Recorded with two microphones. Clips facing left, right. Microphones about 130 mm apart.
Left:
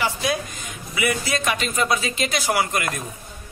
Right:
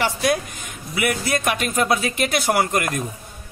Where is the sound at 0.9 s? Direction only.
55° right (ahead or behind).